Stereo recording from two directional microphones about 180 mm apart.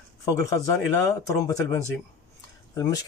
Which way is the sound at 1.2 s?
15° left (ahead or behind).